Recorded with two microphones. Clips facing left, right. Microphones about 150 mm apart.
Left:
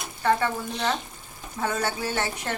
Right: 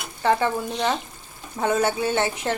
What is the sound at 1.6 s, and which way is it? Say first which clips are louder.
Speech: right 6 dB; 20° right (ahead or behind).